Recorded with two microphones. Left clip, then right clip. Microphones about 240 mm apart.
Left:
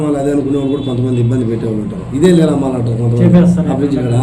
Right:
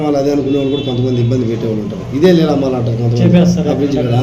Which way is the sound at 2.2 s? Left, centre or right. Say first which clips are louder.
Even; centre.